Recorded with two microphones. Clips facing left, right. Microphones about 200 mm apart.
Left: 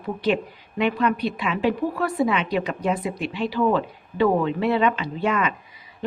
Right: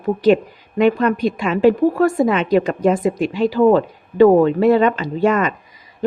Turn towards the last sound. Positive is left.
turn(degrees=-45)  # may be behind; listen again after turning